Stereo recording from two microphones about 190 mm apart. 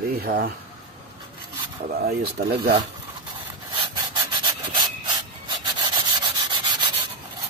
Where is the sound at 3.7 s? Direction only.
20° right (ahead or behind).